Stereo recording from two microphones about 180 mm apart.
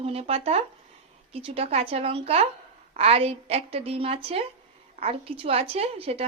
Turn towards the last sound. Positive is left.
turn(degrees=-35)  # may be behind; listen again after turning